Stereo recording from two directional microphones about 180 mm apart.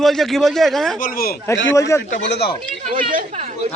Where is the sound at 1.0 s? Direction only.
50° left (ahead or behind).